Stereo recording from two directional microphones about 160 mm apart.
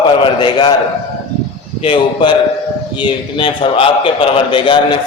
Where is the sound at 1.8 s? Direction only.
30° left (ahead or behind).